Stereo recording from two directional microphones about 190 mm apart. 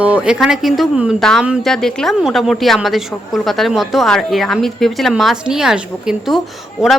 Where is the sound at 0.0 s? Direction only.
5° right (ahead or behind).